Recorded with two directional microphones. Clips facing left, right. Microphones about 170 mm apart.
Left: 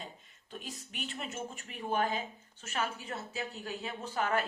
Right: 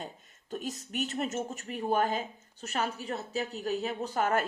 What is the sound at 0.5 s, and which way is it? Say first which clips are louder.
Speech: right 9 dB; 45° right (ahead or behind).